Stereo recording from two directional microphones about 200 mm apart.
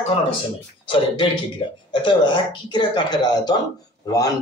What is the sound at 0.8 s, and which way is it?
Speech, 25° left (ahead or behind).